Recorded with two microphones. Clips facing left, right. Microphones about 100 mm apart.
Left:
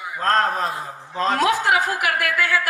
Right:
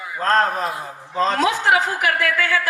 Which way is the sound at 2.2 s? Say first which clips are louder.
Right 1 dB; 15° left (ahead or behind).